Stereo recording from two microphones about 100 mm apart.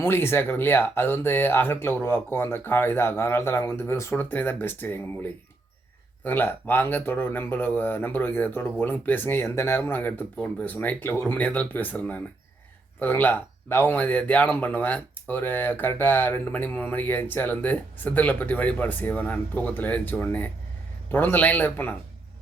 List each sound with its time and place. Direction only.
0.0 s speech: 25° left (ahead or behind)
6.2 s speech: 20° left (ahead or behind)